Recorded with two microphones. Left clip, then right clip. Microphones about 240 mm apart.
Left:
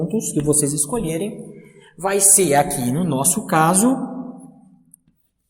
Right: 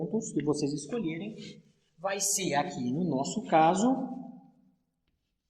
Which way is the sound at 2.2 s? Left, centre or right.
Centre.